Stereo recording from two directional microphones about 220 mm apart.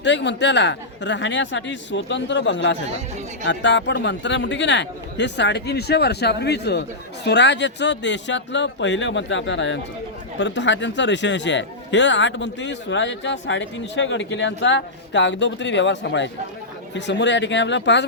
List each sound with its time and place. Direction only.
0.0 s a man's voice: 55° left (ahead or behind)